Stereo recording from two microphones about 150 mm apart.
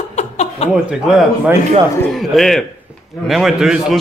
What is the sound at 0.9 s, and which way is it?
A man's voice, centre (ahead or behind).